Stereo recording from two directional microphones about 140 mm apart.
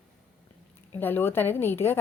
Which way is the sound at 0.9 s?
15° left (ahead or behind).